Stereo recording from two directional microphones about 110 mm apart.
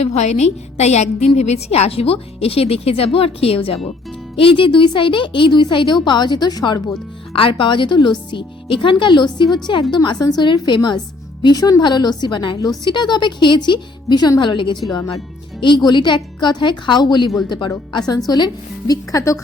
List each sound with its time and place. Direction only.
0.0 s a woman's voice: 85° left
1.4 s a woman's voice: 80° left; by 6.9 s 35° left (ahead or behind)
7.3 s a woman's voice: 50° left (ahead or behind); by 19.4 s 30° left (ahead or behind)